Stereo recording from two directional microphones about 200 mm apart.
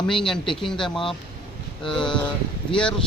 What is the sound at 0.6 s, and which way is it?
Speech, centre (ahead or behind).